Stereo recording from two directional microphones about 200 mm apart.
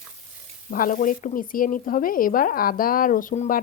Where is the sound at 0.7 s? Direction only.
45° left (ahead or behind).